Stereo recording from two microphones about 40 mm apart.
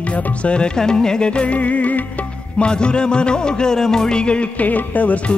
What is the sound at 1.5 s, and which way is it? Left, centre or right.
Music, left.